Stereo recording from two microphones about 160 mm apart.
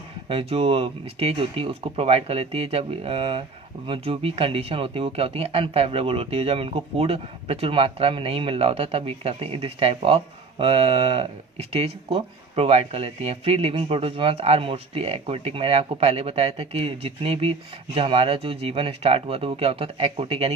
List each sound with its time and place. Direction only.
0.3 s speech: 35° right (ahead or behind)